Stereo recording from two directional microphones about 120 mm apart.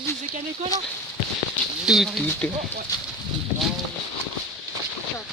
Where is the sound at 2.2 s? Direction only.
15° left (ahead or behind).